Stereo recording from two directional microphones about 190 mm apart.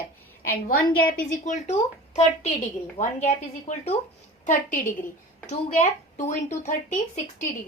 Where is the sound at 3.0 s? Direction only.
40° left (ahead or behind).